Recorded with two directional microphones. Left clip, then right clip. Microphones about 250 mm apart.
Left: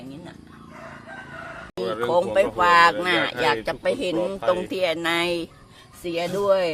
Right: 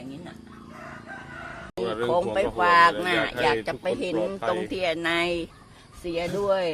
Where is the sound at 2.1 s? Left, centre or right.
Centre.